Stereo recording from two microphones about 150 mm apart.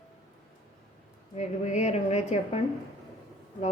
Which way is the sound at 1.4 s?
50° left (ahead or behind).